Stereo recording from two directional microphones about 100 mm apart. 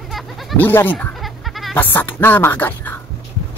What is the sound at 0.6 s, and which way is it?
Speech, 20° left (ahead or behind).